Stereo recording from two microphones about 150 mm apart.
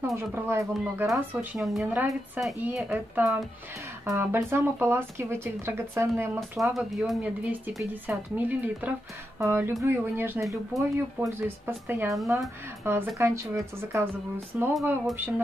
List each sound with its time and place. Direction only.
0.0 s a woman's voice: 15° right (ahead or behind)
6.6 s a woman's voice: centre (ahead or behind)
7.6 s speech: 10° right (ahead or behind)
14.7 s a woman's voice: centre (ahead or behind)
15.1 s speech: 15° right (ahead or behind)